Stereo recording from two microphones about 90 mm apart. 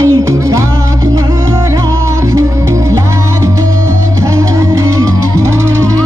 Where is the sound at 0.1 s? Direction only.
40° right (ahead or behind).